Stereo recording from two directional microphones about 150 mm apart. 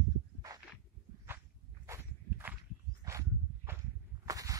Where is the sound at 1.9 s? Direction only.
15° right (ahead or behind).